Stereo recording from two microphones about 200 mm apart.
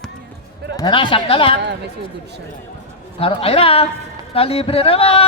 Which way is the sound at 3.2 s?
30° left (ahead or behind).